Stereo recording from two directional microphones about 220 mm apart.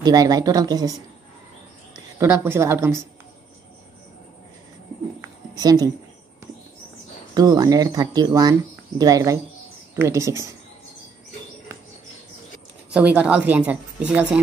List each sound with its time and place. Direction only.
0.0 s speech: 15° right (ahead or behind)
2.1 s speech: 10° right (ahead or behind)
5.6 s speech: 15° right (ahead or behind)
7.3 s speech: 15° right (ahead or behind)
12.9 s a woman's voice: 5° right (ahead or behind)